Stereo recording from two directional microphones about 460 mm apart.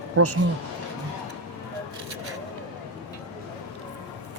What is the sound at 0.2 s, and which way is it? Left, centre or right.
Speech, right.